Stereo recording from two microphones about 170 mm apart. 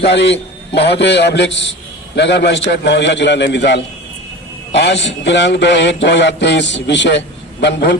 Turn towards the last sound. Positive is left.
turn(degrees=85)